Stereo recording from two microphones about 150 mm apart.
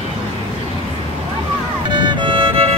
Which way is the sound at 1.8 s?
30° right (ahead or behind).